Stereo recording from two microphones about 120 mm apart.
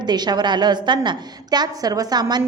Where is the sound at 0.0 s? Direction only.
35° right (ahead or behind).